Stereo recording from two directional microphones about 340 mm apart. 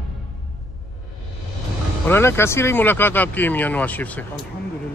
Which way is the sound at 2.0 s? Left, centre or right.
Centre.